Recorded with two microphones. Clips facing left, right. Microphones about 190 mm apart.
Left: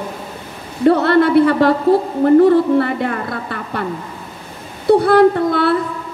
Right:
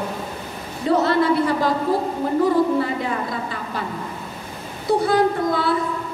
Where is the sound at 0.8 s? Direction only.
60° left (ahead or behind).